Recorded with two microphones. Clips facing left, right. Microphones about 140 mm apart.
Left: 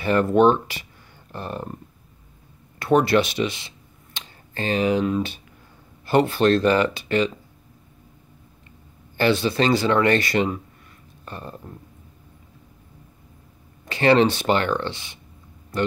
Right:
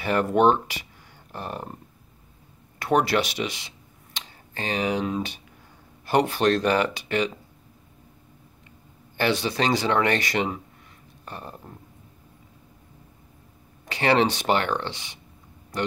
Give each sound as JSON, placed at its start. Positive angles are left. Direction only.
{"t": 0.0, "sound": "speech", "side_deg": -15}
{"t": 2.8, "sound": "speech", "side_deg": -15}
{"t": 9.1, "sound": "speech", "side_deg": -15}
{"t": 13.8, "sound": "speech", "side_deg": -15}